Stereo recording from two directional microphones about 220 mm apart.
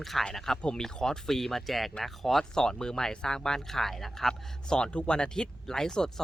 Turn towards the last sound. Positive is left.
turn(degrees=5)  # may be behind; listen again after turning